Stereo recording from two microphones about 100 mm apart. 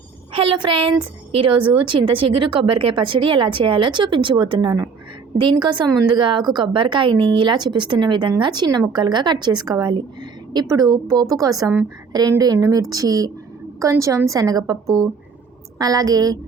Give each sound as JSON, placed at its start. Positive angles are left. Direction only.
{"t": 0.3, "sound": "a woman's voice", "side_deg": -60}